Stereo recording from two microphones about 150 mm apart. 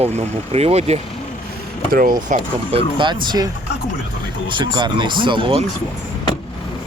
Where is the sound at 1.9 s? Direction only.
70° right (ahead or behind).